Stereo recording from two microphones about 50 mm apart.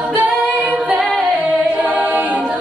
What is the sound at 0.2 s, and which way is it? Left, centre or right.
A capella, right.